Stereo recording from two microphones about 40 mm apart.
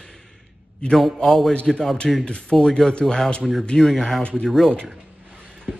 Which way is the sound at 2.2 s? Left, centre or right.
Left.